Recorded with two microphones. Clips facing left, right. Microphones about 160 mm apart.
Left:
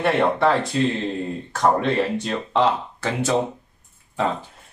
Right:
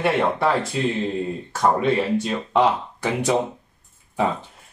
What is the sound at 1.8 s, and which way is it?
Speech, 5° right (ahead or behind).